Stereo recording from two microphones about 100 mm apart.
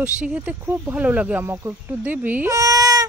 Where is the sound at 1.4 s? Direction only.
25° right (ahead or behind).